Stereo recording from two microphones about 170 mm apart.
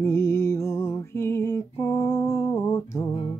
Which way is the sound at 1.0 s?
15° left (ahead or behind).